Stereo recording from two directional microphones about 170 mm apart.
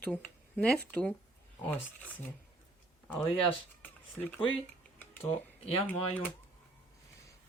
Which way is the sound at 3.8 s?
10° left (ahead or behind).